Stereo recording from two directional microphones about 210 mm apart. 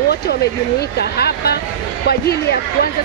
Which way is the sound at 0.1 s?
50° left (ahead or behind).